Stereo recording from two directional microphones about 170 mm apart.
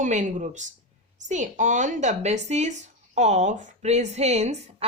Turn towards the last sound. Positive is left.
turn(degrees=-40)  # may be behind; listen again after turning